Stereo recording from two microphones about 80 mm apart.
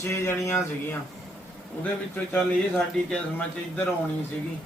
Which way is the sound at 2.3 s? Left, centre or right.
Centre.